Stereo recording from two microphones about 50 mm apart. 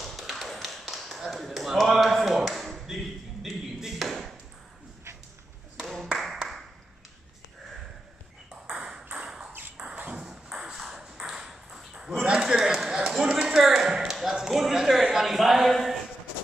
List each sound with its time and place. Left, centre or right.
0.0 s tap: centre
3.4 s ping: centre
5.8 s clapping: centre
8.6 s ping: centre
9.9 s ping: right
10.2 s ping: centre
14.3 s a sound: centre